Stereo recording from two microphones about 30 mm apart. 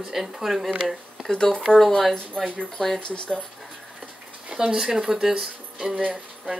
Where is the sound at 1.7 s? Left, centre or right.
Left.